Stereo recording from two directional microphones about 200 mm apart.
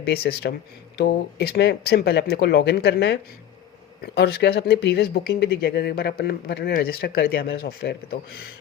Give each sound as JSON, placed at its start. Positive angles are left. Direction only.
{"t": 0.0, "sound": "speech", "side_deg": 50}